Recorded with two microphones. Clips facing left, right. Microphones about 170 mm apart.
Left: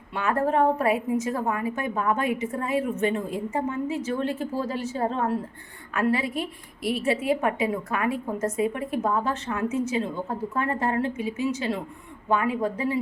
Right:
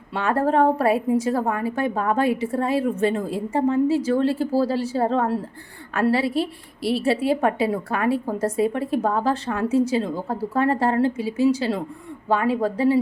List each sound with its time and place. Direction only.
0.1 s a woman's voice: 30° right (ahead or behind)